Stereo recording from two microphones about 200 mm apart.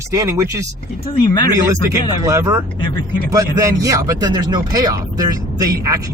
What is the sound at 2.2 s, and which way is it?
Speech, 15° right (ahead or behind).